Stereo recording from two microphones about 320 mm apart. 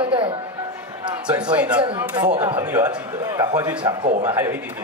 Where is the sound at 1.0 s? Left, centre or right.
Centre.